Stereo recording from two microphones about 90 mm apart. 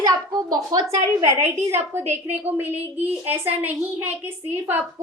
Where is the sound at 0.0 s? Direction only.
45° right (ahead or behind).